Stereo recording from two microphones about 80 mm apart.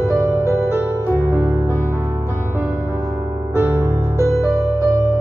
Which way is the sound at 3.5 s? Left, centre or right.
Right.